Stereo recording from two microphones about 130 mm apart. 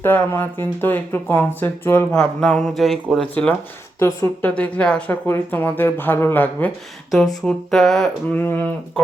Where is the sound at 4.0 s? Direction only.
15° left (ahead or behind).